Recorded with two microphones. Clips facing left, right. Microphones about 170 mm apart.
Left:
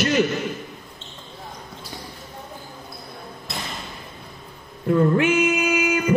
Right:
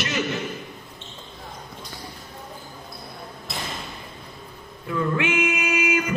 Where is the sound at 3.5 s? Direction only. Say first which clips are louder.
Left 1 dB; centre (ahead or behind).